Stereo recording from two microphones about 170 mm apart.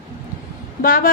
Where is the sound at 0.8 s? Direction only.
60° left (ahead or behind).